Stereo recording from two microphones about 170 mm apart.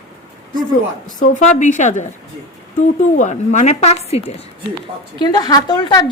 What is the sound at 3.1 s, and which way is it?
A woman's voice, 45° left (ahead or behind).